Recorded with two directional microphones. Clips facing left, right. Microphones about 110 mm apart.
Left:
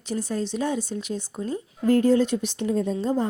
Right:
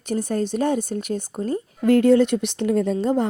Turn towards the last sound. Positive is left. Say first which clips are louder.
# right 4 dB
turn(degrees=-65)  # may be behind; listen again after turning